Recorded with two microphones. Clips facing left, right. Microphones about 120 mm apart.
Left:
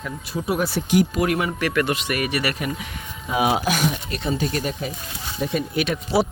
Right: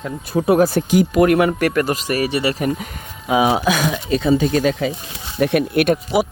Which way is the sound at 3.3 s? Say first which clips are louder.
Right 6 dB; 80° right.